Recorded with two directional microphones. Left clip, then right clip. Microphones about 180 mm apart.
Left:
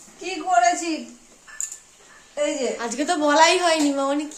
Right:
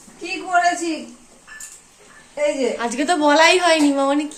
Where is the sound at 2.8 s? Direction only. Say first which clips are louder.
Right 4 dB; 5° left (ahead or behind).